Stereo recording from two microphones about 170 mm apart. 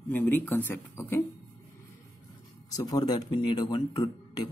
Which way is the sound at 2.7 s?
20° left (ahead or behind).